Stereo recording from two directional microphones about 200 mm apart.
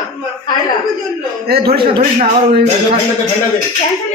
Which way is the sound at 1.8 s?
25° right (ahead or behind).